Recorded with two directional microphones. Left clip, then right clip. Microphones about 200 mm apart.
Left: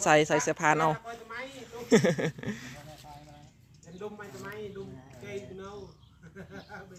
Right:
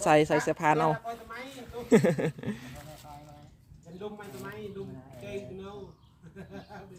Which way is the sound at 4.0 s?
40° right (ahead or behind).